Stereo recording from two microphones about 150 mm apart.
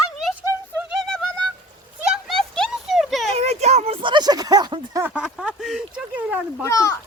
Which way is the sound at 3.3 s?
45° right (ahead or behind).